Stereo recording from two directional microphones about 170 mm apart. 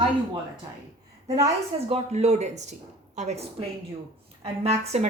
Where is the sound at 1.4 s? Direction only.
40° right (ahead or behind).